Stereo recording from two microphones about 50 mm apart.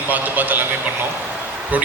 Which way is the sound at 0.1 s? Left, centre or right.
Right.